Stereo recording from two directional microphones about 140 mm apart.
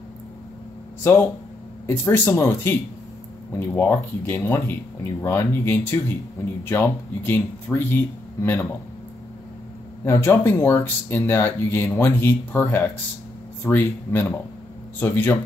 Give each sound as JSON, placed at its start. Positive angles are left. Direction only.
{"t": 1.9, "sound": "speech", "side_deg": 15}
{"t": 10.0, "sound": "speech", "side_deg": 20}